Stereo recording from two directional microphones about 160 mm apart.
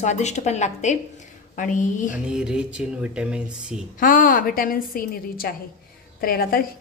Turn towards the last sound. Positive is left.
turn(degrees=65)  # may be behind; listen again after turning